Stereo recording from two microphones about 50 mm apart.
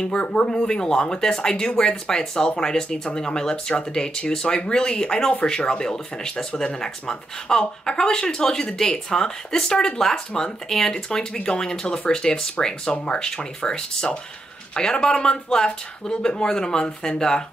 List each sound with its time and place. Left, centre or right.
0.0 s speech: centre